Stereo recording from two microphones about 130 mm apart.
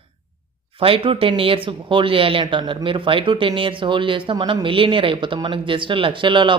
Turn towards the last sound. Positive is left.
turn(degrees=-40)  # may be behind; listen again after turning